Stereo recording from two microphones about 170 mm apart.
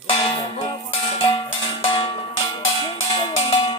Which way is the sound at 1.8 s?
30° left (ahead or behind).